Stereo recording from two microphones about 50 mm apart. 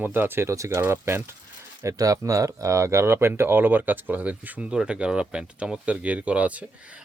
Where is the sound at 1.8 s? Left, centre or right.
Right.